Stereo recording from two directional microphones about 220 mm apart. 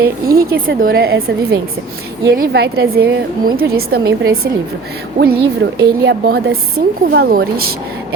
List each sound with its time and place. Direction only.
0.0 s a woman's voice: 40° right (ahead or behind)